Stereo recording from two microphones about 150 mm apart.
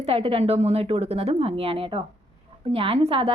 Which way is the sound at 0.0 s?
40° right (ahead or behind).